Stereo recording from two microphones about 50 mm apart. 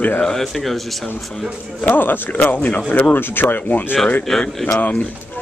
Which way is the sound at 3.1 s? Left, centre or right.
Left.